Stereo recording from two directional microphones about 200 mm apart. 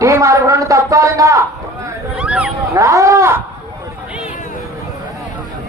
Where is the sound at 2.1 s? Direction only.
5° right (ahead or behind).